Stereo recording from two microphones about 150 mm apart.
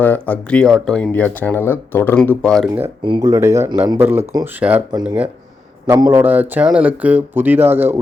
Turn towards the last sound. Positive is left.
turn(degrees=-15)  # may be behind; listen again after turning